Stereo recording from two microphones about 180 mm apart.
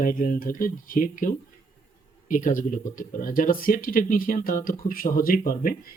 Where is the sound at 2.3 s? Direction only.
45° left (ahead or behind).